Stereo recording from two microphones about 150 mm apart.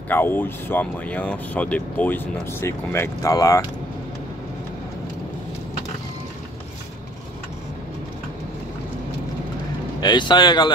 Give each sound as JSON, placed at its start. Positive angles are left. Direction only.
{"t": 0.1, "sound": "speech", "side_deg": 15}
{"t": 9.9, "sound": "speech", "side_deg": 30}